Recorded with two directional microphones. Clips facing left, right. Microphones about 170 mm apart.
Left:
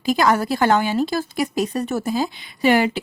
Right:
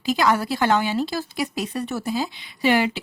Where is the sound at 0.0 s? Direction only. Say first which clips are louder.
Left 3 dB; 45° left (ahead or behind).